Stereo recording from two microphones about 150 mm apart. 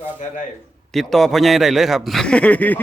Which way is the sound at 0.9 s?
Centre (ahead or behind).